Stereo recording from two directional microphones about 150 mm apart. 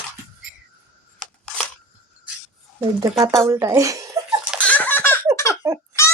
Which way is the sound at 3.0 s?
25° right (ahead or behind).